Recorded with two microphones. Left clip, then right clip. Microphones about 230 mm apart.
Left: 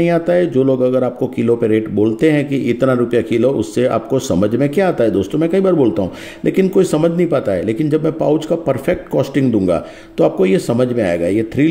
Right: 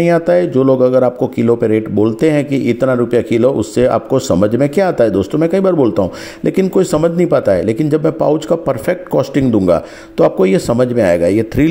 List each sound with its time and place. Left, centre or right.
0.0 s speech: centre